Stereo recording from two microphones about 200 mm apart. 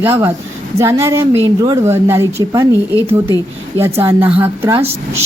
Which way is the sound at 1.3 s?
25° right (ahead or behind).